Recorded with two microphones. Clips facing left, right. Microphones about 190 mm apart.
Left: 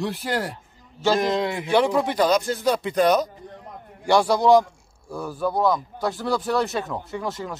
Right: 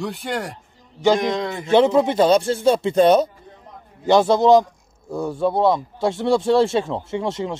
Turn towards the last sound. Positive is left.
turn(degrees=-25)  # may be behind; listen again after turning